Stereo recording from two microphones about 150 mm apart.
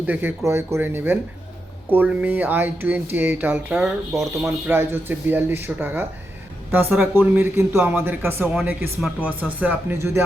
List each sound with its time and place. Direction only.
0.0 s speech: 10° right (ahead or behind)